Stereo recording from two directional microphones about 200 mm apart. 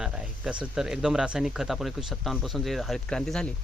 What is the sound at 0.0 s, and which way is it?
Speech, 5° right (ahead or behind).